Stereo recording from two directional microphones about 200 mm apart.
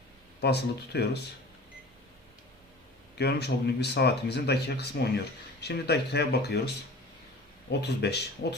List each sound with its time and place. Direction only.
0.4 s speech: 55° left (ahead or behind)
3.2 s speech: 55° left (ahead or behind)
7.7 s speech: 55° left (ahead or behind)